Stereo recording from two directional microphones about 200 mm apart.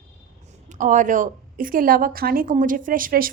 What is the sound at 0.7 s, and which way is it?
A woman's voice, 40° right (ahead or behind).